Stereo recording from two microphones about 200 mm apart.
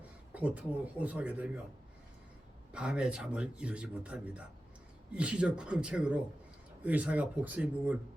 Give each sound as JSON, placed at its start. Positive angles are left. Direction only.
{"t": 0.3, "sound": "speech", "side_deg": -5}
{"t": 2.7, "sound": "speech", "side_deg": -5}